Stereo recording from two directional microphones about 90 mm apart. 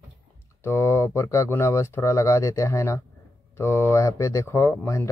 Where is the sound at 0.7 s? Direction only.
30° left (ahead or behind).